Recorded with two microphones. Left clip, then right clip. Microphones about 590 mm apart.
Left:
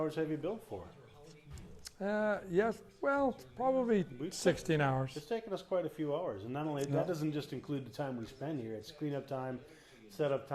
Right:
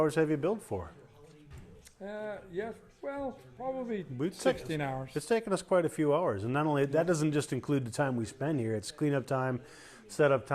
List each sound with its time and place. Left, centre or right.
0.0 s speech: right
2.0 s speech: left
5.1 s speech: right